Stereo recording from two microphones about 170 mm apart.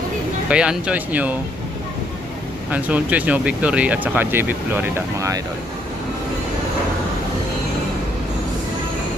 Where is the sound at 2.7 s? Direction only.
10° right (ahead or behind).